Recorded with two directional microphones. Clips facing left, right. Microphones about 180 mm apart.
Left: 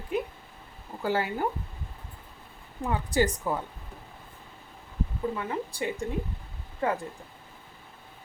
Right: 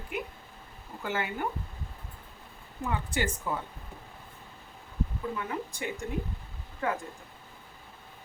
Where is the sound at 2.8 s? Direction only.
35° left (ahead or behind).